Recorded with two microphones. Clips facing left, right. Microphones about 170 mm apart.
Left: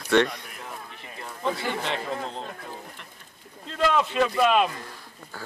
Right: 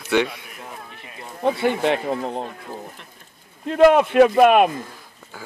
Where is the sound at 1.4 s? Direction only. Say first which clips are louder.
Right 9 dB; 55° right (ahead or behind).